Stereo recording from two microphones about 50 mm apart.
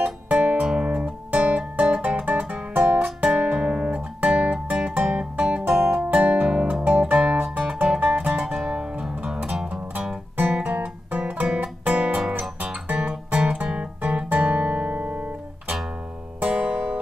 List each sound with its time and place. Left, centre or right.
0.0 s music: right
5.7 s music: right
6.1 s music: right
10.3 s music: right
11.5 s music: right
12.8 s guitar: right
16.4 s music: right